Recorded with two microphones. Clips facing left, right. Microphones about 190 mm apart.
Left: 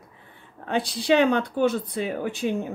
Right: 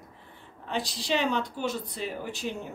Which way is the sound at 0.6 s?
55° left (ahead or behind).